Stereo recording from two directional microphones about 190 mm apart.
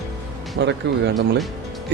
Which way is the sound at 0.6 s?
65° right (ahead or behind).